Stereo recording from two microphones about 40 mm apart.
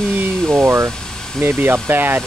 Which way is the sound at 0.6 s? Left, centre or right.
Right.